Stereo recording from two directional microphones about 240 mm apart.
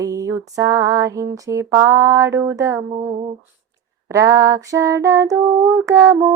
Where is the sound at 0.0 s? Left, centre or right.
Centre.